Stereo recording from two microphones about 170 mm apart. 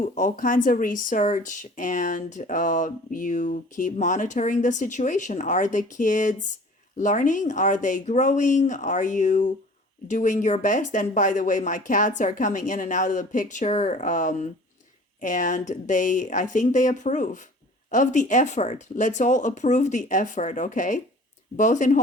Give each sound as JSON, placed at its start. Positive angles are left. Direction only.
{"t": 0.0, "sound": "speech", "side_deg": 50}